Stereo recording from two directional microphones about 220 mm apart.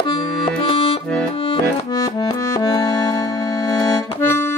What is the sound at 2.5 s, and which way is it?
Music, 15° left (ahead or behind).